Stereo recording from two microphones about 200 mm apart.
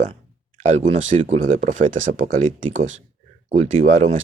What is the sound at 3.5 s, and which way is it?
Speech, 35° right (ahead or behind).